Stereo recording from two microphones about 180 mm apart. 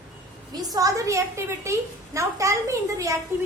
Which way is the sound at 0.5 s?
20° right (ahead or behind).